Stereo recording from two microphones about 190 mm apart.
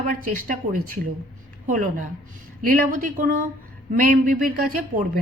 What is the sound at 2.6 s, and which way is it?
A woman's voice, 45° right (ahead or behind).